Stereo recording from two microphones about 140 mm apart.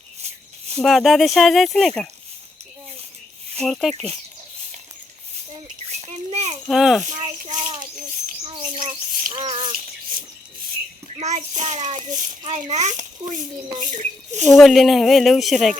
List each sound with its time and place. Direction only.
0.8 s speech: centre (ahead or behind)
3.7 s speech: centre (ahead or behind)
3.9 s a sound: 50° right (ahead or behind)
6.0 s a child's voice: 50° right (ahead or behind)
6.7 s speech: centre (ahead or behind)
7.5 s a child's voice: 65° right (ahead or behind)
9.4 s a sound: 45° right (ahead or behind)
9.7 s a sound: 90° right
11.2 s a child's voice: 55° right (ahead or behind)
14.5 s speech: centre (ahead or behind)